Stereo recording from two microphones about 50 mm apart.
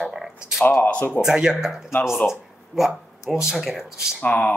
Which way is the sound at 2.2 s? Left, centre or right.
Centre.